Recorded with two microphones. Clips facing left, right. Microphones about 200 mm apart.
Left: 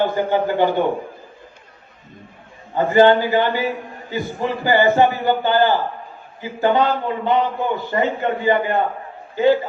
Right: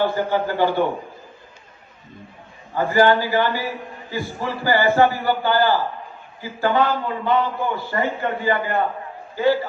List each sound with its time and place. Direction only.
0.0 s a man's voice: 20° left (ahead or behind)
2.7 s a man's voice: 20° left (ahead or behind)